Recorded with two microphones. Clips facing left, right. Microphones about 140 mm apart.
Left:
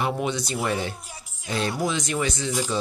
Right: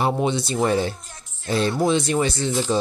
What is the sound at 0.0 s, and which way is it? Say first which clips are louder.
Speech: right 4 dB; 30° right (ahead or behind).